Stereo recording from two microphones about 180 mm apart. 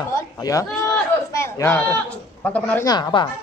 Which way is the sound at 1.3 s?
15° left (ahead or behind).